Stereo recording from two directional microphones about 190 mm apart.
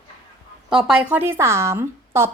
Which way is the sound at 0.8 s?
5° right (ahead or behind).